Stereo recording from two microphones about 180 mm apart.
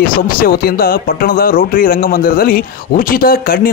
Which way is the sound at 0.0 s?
55° left (ahead or behind).